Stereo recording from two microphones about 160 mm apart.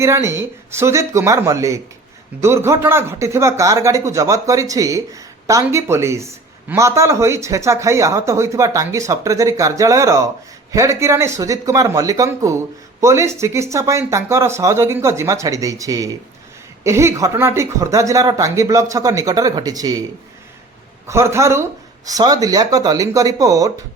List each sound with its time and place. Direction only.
0.0 s speech: 15° right (ahead or behind)
21.1 s speech: 15° right (ahead or behind)